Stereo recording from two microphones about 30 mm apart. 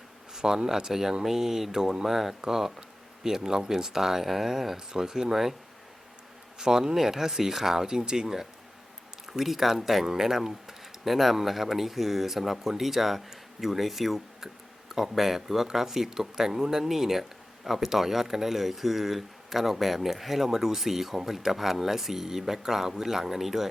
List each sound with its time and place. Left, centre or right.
0.3 s speech: centre
5.3 s speech: centre
6.6 s speech: centre
9.4 s speech: centre